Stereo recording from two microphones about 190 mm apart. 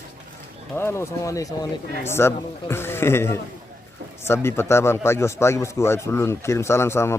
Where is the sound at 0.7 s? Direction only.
15° left (ahead or behind).